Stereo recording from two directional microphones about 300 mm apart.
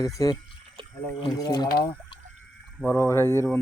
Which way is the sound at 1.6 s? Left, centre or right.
Left.